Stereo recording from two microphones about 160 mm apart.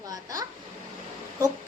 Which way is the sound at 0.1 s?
25° right (ahead or behind).